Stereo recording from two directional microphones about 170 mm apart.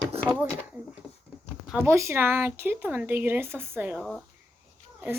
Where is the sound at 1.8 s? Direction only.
15° right (ahead or behind).